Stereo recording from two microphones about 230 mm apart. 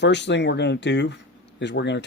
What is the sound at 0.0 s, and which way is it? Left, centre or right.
Speech, left.